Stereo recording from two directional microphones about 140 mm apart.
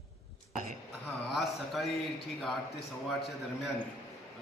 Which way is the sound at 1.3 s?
Centre (ahead or behind).